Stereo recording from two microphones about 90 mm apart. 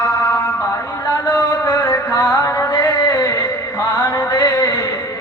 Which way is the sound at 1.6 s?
35° left (ahead or behind).